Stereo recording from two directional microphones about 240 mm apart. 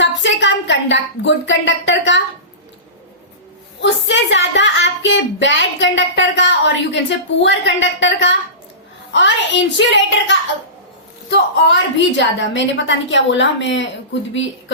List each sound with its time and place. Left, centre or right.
0.0 s a woman's voice: left
3.8 s speech: left